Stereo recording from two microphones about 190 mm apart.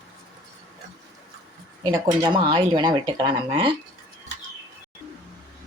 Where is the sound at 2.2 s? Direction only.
25° right (ahead or behind).